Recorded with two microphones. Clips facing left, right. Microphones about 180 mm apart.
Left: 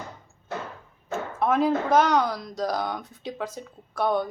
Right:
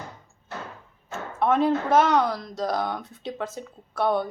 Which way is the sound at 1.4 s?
Centre (ahead or behind).